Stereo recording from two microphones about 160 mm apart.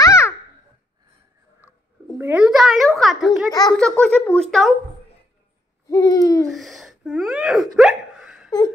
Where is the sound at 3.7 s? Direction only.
5° left (ahead or behind).